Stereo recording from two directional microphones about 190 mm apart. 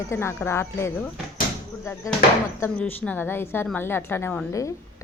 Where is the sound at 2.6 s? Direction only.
10° left (ahead or behind).